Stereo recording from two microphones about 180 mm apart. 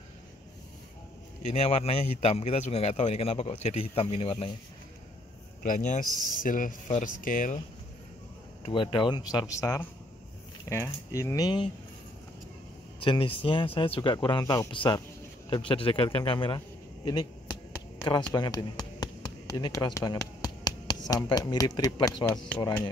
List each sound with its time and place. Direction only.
1.5 s a man's voice: 35° left (ahead or behind)
5.6 s speech: 45° left (ahead or behind)
6.0 s speech: 20° right (ahead or behind)
6.3 s speech: 50° left (ahead or behind)
8.6 s speech: 30° left (ahead or behind)
13.0 s a man's voice: 30° left (ahead or behind)
18.0 s a sound: 25° left (ahead or behind)
21.1 s speech: 20° left (ahead or behind)